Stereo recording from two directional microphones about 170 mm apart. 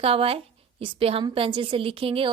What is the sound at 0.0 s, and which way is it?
A woman's voice, 35° right (ahead or behind).